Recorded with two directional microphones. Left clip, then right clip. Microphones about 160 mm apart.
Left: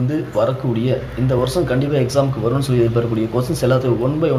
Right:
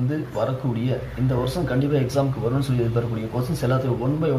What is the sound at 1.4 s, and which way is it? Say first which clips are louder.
A man's voice: left 6 dB; 25° left (ahead or behind).